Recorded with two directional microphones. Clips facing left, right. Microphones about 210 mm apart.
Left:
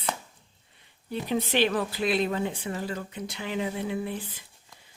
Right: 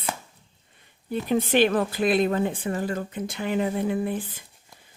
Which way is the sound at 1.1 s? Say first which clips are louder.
Right 5 dB; 50° right (ahead or behind).